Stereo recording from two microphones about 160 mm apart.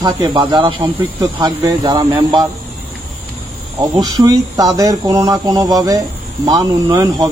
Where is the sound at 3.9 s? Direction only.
25° right (ahead or behind).